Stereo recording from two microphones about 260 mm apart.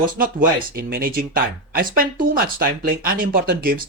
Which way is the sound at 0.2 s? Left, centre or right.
Right.